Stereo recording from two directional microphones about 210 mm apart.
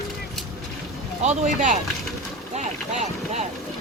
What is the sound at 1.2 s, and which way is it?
Speech, 35° right (ahead or behind).